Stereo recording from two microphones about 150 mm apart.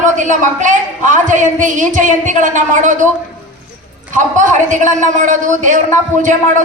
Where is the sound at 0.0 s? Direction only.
60° right (ahead or behind).